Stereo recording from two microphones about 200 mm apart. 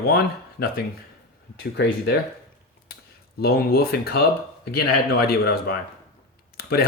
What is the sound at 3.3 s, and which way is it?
Speech, 50° left (ahead or behind).